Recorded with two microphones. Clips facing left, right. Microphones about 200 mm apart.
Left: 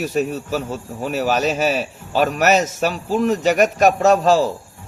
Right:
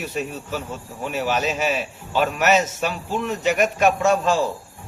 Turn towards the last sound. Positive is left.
turn(degrees=40)  # may be behind; listen again after turning